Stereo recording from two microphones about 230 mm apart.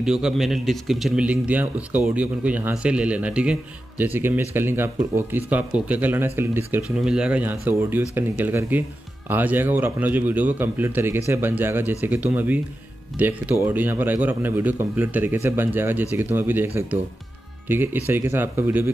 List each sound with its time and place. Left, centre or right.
0.0 s a man's voice: centre